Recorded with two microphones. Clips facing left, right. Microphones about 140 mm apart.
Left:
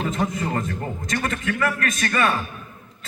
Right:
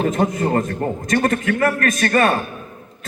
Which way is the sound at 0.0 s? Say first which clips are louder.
Right 6 dB; 50° right (ahead or behind).